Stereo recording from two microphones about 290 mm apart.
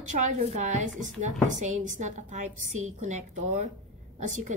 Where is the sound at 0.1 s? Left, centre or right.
Right.